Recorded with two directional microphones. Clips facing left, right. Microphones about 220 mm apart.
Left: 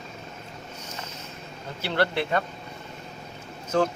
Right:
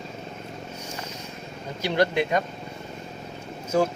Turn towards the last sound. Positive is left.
turn(degrees=-10)  # may be behind; listen again after turning